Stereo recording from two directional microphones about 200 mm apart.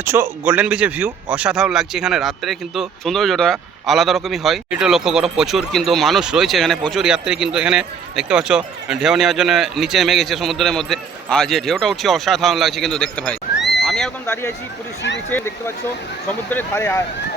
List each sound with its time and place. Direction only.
0.0 s a man's voice: 10° right (ahead or behind); by 13.3 s 5° left (ahead or behind)
13.6 s neigh: 60° left (ahead or behind)
13.8 s speech: centre (ahead or behind)